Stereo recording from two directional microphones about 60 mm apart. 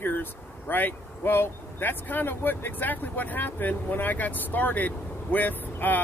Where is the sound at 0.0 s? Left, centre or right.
Left.